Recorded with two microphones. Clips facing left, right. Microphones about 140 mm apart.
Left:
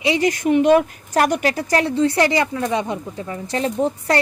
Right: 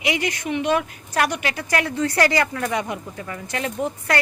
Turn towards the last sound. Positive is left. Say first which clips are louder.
# left 5 dB
turn(degrees=30)  # may be behind; listen again after turning